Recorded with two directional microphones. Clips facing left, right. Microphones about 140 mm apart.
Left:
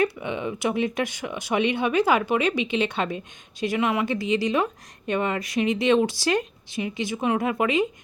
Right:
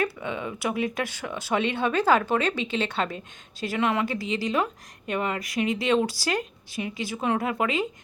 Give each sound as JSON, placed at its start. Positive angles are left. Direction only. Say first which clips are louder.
{"t": 0.0, "sound": "a woman's voice", "louder": "left 4 dB", "side_deg": 20}